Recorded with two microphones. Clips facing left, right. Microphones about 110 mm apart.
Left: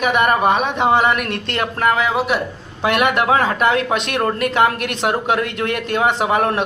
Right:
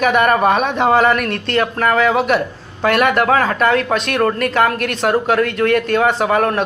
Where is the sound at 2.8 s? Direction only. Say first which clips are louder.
Right 2 dB; 20° left (ahead or behind).